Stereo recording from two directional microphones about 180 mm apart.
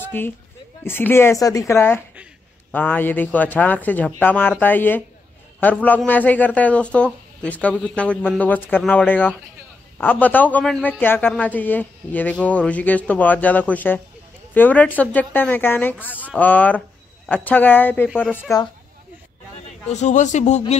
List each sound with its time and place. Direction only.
0.0 s a sound: 10° left (ahead or behind)
0.8 s speech: 10° left (ahead or behind)
18.0 s speech: 5° right (ahead or behind)
19.9 s a man's voice: 40° left (ahead or behind)